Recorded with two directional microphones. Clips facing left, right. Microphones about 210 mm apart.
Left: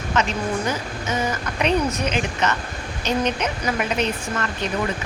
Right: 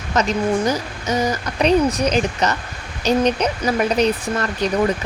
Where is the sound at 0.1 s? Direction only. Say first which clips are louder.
Right 5 dB; 40° right (ahead or behind).